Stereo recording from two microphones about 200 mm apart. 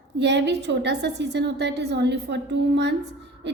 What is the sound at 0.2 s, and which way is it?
A woman's voice, 60° right (ahead or behind).